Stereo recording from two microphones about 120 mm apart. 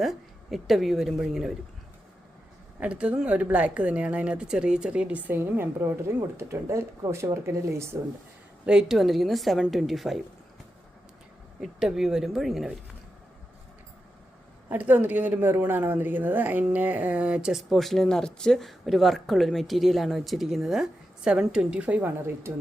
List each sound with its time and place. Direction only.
0.0 s a woman's voice: centre (ahead or behind)
2.8 s a woman's voice: 10° right (ahead or behind)
8.6 s a woman's voice: 5° right (ahead or behind)
11.6 s a woman's voice: 5° right (ahead or behind)
14.7 s a woman's voice: 15° right (ahead or behind)